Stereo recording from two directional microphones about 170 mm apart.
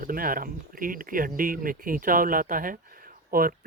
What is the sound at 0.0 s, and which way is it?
Speech, 55° right (ahead or behind).